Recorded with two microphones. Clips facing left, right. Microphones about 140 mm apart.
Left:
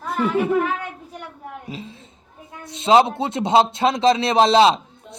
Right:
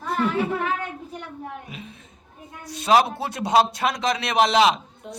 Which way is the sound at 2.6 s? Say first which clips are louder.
Left 3 dB; 25° left (ahead or behind).